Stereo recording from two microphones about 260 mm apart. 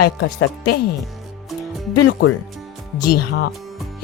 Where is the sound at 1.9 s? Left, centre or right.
Left.